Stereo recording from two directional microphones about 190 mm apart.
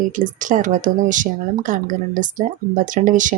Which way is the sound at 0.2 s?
45° right (ahead or behind).